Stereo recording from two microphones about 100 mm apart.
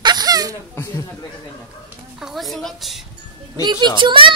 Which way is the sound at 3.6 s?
50° right (ahead or behind).